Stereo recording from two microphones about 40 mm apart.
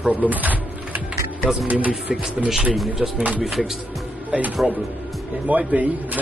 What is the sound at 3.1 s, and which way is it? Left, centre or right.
Speech, right.